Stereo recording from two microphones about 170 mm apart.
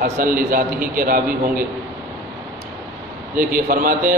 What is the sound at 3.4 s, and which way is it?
Speech, 55° right (ahead or behind).